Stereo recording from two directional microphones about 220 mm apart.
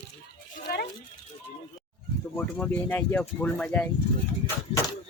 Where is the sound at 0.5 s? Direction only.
45° left (ahead or behind).